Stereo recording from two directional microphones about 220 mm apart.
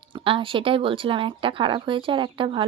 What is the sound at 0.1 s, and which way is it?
Speech, 25° right (ahead or behind).